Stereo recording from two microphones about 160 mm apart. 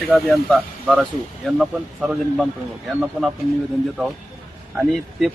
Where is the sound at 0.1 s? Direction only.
Centre (ahead or behind).